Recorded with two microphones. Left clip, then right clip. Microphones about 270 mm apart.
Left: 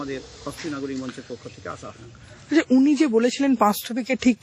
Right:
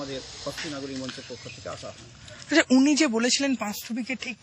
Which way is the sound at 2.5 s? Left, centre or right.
Centre.